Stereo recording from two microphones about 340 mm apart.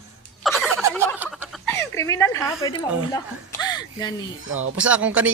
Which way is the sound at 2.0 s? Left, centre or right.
Centre.